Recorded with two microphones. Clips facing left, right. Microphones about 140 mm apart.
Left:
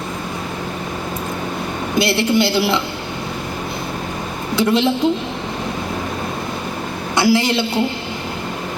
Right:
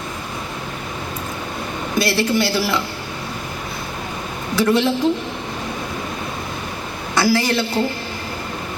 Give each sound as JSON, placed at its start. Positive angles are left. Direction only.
{"t": 2.0, "sound": "a woman's voice", "side_deg": 25}
{"t": 4.5, "sound": "a woman's voice", "side_deg": 20}
{"t": 7.2, "sound": "a woman's voice", "side_deg": 20}